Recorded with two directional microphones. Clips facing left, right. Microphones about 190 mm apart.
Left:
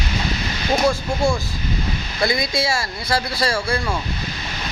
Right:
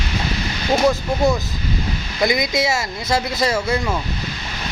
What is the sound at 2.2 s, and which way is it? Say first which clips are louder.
Speech: right 3 dB; 20° right (ahead or behind).